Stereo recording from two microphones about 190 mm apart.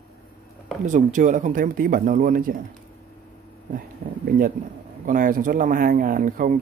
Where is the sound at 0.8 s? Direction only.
40° right (ahead or behind).